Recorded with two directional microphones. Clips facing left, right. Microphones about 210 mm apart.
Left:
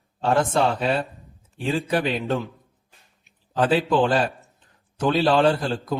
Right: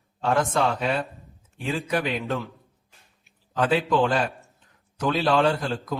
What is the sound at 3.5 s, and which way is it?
A man's voice, 30° left (ahead or behind).